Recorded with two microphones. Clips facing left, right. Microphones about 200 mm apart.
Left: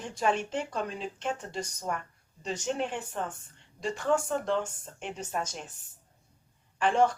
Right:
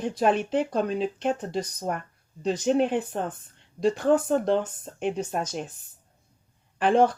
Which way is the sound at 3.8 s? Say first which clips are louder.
Right 7 dB; 35° right (ahead or behind).